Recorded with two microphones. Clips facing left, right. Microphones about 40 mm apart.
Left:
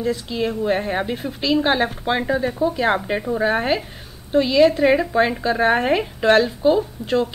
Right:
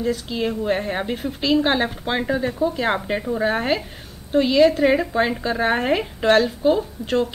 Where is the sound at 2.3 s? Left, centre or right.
Centre.